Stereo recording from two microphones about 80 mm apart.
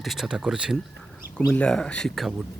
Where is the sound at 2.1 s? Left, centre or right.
Centre.